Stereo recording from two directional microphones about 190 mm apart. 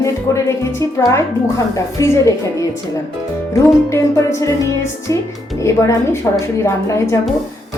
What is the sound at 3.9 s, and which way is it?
A woman's voice, 15° left (ahead or behind).